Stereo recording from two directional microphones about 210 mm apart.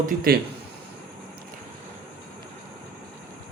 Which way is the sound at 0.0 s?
45° right (ahead or behind).